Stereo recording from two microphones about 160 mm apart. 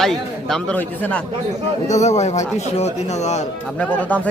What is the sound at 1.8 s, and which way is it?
Speech, 45° left (ahead or behind).